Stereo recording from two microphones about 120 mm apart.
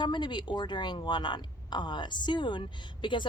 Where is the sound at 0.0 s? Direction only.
40° left (ahead or behind).